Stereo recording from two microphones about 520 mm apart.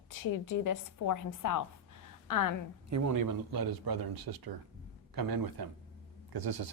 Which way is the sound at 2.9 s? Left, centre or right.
Right.